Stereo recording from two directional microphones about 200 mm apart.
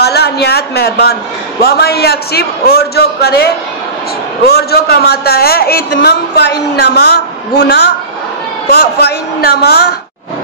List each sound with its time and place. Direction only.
0.0 s a man's voice: 55° left (ahead or behind)